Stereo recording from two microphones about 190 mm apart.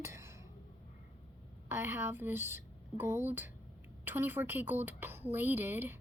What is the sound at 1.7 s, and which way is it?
A woman's voice, 15° right (ahead or behind).